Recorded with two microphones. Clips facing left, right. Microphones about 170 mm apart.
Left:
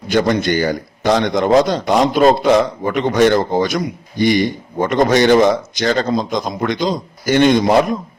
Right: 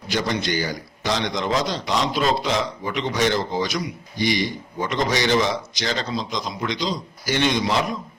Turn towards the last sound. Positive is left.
turn(degrees=50)  # may be behind; listen again after turning